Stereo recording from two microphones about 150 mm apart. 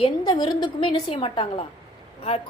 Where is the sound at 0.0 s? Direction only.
30° left (ahead or behind).